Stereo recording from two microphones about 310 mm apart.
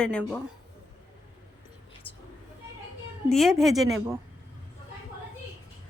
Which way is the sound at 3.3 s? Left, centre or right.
Centre.